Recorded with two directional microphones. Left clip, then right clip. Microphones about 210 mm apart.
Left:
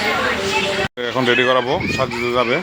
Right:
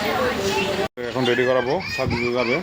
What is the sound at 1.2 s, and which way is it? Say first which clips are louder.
Speech: left 4 dB; centre (ahead or behind).